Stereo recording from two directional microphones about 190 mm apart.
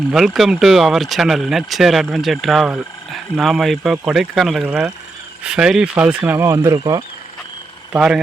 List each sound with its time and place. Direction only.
0.1 s speech: centre (ahead or behind)
7.9 s speech: 5° right (ahead or behind)